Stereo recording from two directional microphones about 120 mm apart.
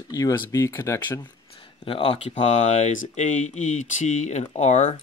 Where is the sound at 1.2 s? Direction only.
45° left (ahead or behind); by 4.9 s 85° left.